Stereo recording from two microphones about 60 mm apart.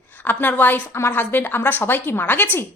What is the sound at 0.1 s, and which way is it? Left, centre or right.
A woman's voice, left.